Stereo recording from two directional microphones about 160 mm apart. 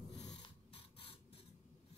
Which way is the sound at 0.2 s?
25° left (ahead or behind).